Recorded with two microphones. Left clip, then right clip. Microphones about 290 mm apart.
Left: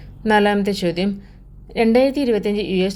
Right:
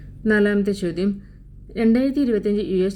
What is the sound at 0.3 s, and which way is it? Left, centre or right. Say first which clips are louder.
Speech: left 3 dB; left.